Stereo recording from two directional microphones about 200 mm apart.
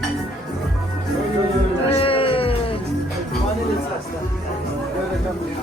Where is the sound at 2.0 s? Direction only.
25° left (ahead or behind).